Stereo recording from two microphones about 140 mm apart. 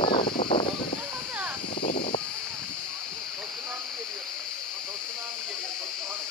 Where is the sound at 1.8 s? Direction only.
75° left (ahead or behind).